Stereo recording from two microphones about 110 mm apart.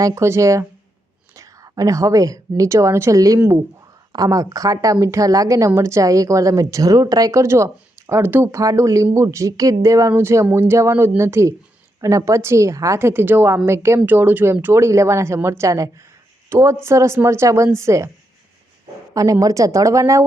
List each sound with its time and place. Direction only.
0.0 s a woman's voice: 30° right (ahead or behind)
19.1 s a woman's voice: 30° right (ahead or behind)